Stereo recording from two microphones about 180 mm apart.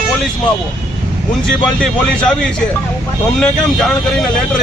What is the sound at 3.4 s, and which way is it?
Speech, centre (ahead or behind).